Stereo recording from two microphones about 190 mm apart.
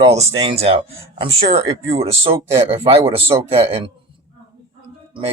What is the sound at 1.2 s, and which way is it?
Speech, 35° right (ahead or behind).